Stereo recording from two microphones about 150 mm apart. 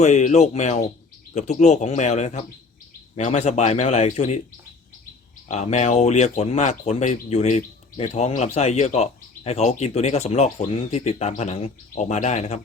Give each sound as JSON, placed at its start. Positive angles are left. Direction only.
{"t": 0.0, "sound": "speech", "side_deg": 50}
{"t": 5.5, "sound": "speech", "side_deg": 45}